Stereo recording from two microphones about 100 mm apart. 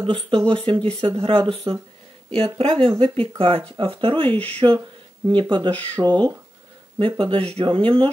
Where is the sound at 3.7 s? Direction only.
60° right (ahead or behind).